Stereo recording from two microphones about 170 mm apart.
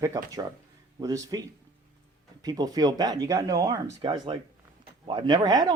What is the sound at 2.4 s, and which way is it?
Speech, 20° right (ahead or behind).